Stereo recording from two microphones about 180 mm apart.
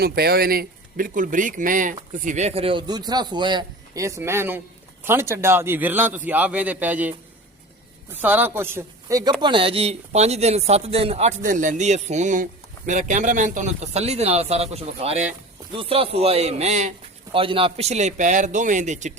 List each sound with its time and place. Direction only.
0.0 s a man's voice: 60° right (ahead or behind); by 7.1 s 10° right (ahead or behind)
8.1 s a man's voice: 10° right (ahead or behind); by 19.1 s 40° right (ahead or behind)